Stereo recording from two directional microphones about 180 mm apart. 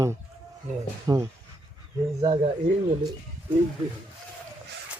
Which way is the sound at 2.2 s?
30° right (ahead or behind).